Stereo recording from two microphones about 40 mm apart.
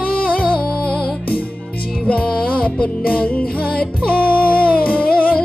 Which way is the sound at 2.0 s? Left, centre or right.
Left.